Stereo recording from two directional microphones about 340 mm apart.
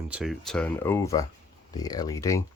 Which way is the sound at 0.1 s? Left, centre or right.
Centre.